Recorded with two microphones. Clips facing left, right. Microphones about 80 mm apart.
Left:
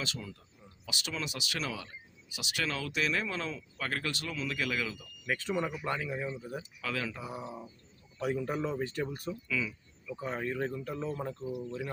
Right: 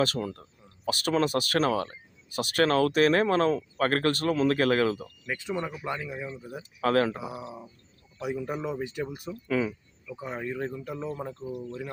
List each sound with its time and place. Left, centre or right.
0.0 s speech: right
5.5 s speech: centre
6.8 s speech: right
7.2 s speech: centre
9.5 s speech: right
10.2 s speech: centre
11.5 s speech: centre